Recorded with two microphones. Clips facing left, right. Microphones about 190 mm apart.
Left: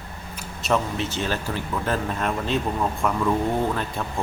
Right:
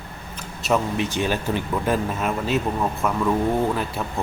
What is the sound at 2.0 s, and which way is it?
A man's voice, 5° right (ahead or behind).